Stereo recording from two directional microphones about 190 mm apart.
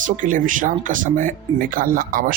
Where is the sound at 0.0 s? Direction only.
45° right (ahead or behind).